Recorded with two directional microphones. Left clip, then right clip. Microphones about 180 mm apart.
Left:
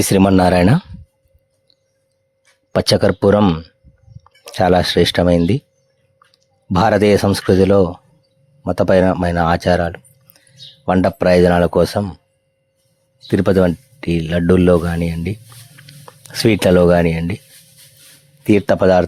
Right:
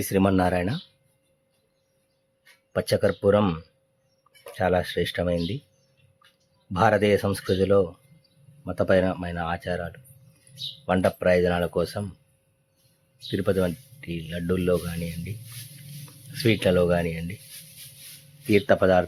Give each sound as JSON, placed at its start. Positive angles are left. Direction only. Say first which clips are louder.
{"t": 0.0, "sound": "speech", "louder": "left 10 dB", "side_deg": 45}
{"t": 2.7, "sound": "speech", "louder": "left 9 dB", "side_deg": 50}
{"t": 4.4, "sound": "speech", "louder": "left 10 dB", "side_deg": 50}
{"t": 6.7, "sound": "speech", "louder": "left 8 dB", "side_deg": 50}
{"t": 13.2, "sound": "speech", "louder": "left 10 dB", "side_deg": 50}
{"t": 16.3, "sound": "speech", "louder": "left 9 dB", "side_deg": 50}
{"t": 18.5, "sound": "speech", "louder": "left 7 dB", "side_deg": 45}